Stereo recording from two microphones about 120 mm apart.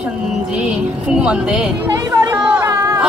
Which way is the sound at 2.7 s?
25° right (ahead or behind).